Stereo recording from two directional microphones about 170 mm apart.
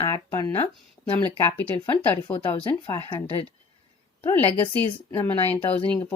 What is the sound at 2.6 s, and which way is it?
Speech, 25° left (ahead or behind).